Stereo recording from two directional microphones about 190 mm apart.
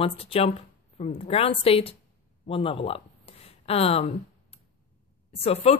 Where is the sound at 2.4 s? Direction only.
30° left (ahead or behind).